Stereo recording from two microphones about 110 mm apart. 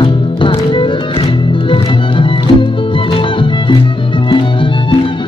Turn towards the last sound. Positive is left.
turn(degrees=50)  # may be behind; listen again after turning